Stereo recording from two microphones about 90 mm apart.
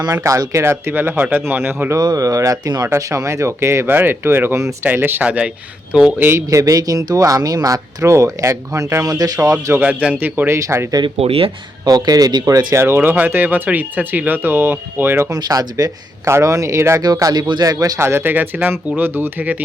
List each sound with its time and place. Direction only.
0.2 s speech: 35° right (ahead or behind)
2.0 s speech: 40° right (ahead or behind); by 6.1 s 10° right (ahead or behind)
6.1 s speech: 30° right (ahead or behind)
9.7 s speech: 15° right (ahead or behind); by 10.8 s 30° right (ahead or behind)
11.2 s speech: 90° right
11.9 s speech: 45° right (ahead or behind)
12.7 s speech: 30° right (ahead or behind)
15.3 s speech: 45° right (ahead or behind)
17.0 s speech: 45° right (ahead or behind)
18.0 s speech: 25° right (ahead or behind)